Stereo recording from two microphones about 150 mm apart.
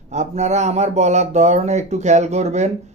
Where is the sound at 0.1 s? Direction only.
50° right (ahead or behind).